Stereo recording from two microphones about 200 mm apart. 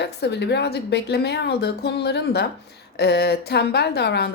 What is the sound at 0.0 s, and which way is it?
A woman's voice, 60° left (ahead or behind).